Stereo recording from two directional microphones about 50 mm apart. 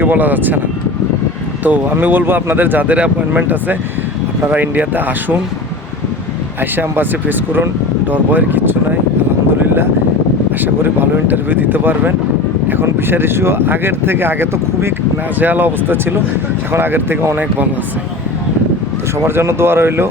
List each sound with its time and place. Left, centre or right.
0.0 s speech: right
1.6 s speech: right
6.6 s speech: right
10.6 s speech: right
15.4 s speech: right
19.2 s speech: right